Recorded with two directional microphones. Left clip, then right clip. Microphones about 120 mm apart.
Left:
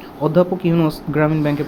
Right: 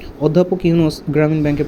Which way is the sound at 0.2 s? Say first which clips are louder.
Right 1 dB; 30° right (ahead or behind).